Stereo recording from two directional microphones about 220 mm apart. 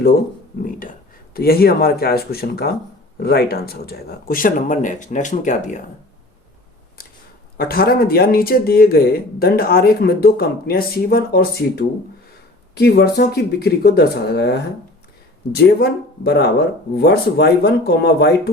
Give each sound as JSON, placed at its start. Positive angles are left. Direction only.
{"t": 0.6, "sound": "speech", "side_deg": 40}
{"t": 7.5, "sound": "speech", "side_deg": 45}